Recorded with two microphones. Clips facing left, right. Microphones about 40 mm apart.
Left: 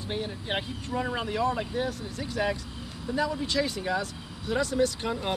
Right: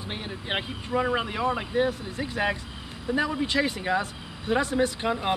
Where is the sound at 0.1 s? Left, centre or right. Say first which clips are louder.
Even; right.